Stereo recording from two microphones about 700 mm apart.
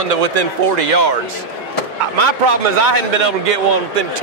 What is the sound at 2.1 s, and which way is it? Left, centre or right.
A man's voice, right.